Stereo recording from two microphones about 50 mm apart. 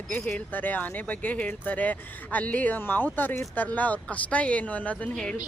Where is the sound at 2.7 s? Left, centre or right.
Left.